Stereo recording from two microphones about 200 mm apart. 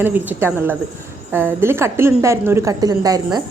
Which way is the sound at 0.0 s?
10° right (ahead or behind).